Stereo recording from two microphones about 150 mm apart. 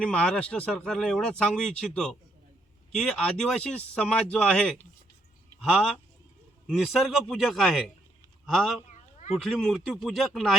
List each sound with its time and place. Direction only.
0.0 s speech: 5° left (ahead or behind)
8.9 s a sound: 50° left (ahead or behind)
9.4 s speech: centre (ahead or behind)